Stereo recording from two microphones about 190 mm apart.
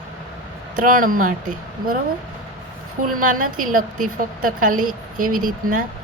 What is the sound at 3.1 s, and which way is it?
A woman's voice, 45° right (ahead or behind).